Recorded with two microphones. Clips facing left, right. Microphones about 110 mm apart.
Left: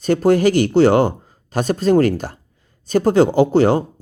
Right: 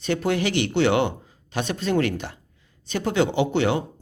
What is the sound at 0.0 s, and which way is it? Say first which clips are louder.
Speech: left 9 dB; 40° left (ahead or behind).